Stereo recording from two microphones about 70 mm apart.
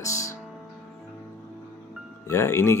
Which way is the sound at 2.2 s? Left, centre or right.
Left.